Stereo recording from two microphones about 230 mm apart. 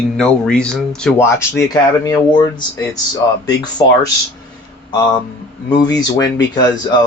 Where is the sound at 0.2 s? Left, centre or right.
Centre.